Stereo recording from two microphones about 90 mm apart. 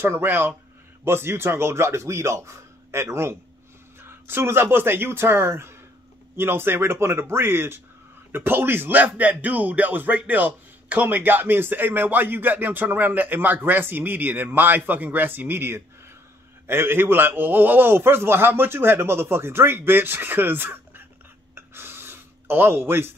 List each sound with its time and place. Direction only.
0.0 s speech: 25° right (ahead or behind)
21.5 s gasp: 25° right (ahead or behind)